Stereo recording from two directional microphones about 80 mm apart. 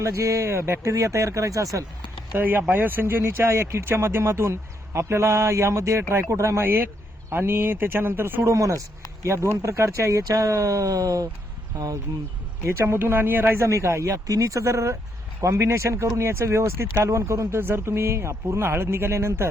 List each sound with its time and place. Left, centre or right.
0.0 s speech: right
2.4 s speech: right
8.5 s speech: right
12.6 s speech: right
13.6 s speech: right